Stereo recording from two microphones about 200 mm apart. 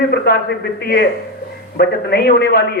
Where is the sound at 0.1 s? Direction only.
50° left (ahead or behind).